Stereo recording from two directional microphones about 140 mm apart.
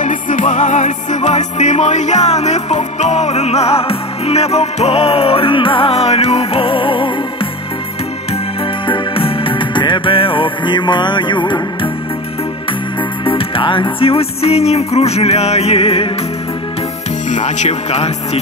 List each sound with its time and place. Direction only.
0.0 s music: 65° left (ahead or behind); by 7.1 s 40° left (ahead or behind)
8.8 s music: 40° left (ahead or behind)
13.2 s music: 40° left (ahead or behind)
17.3 s music: 55° left (ahead or behind)